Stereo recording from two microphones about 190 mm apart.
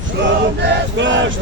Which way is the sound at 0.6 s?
75° right (ahead or behind).